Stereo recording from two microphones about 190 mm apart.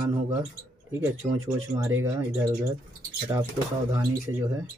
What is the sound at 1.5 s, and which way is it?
Speech, 10° right (ahead or behind).